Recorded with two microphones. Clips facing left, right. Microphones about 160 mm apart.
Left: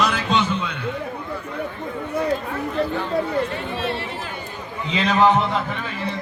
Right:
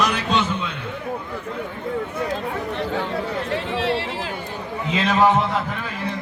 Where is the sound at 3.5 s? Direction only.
90° right.